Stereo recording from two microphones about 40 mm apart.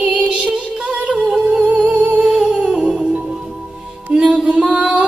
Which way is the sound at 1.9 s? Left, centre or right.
Right.